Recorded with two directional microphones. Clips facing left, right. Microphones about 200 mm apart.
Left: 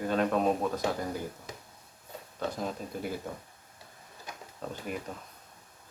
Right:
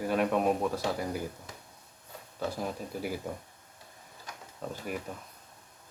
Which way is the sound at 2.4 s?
10° right (ahead or behind).